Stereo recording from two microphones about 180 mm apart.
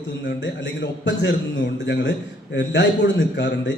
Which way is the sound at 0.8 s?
75° left (ahead or behind).